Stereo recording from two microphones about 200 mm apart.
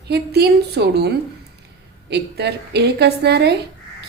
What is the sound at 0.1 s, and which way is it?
A woman's voice, 55° right (ahead or behind).